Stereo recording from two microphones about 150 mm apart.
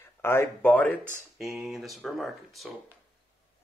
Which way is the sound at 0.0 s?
15° left (ahead or behind).